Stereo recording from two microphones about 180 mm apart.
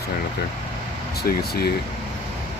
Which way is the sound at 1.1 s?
60° left (ahead or behind).